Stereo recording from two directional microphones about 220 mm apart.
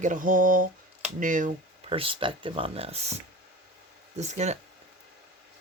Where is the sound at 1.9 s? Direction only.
25° right (ahead or behind).